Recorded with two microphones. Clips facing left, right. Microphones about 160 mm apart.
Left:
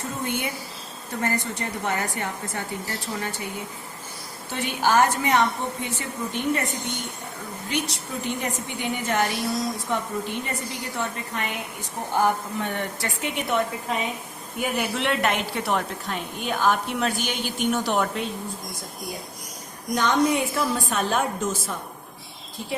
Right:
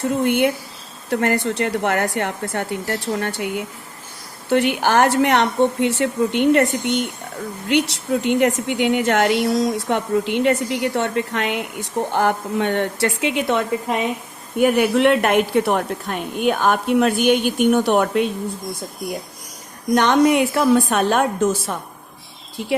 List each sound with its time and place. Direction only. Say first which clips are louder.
0.0 s speech: right 11 dB; 70° right (ahead or behind); by 13.6 s 90° right
14.6 s a woman's voice: right 11 dB; 60° right (ahead or behind)
20.0 s speech: right 6 dB; 70° right (ahead or behind)